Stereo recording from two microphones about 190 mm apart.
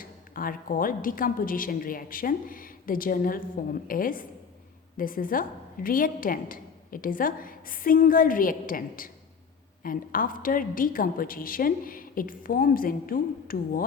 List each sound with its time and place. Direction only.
0.0 s a woman's voice: 50° left (ahead or behind)